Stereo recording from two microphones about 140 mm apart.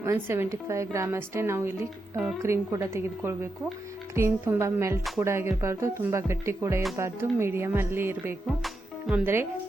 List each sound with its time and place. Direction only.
0.0 s a woman's voice: 20° right (ahead or behind)